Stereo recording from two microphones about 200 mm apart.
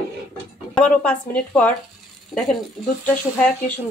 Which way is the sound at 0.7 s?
5° left (ahead or behind).